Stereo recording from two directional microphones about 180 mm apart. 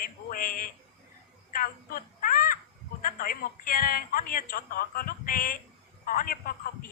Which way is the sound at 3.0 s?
50° left (ahead or behind).